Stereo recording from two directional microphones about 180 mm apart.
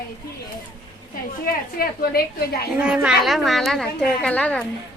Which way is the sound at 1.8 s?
55° left (ahead or behind).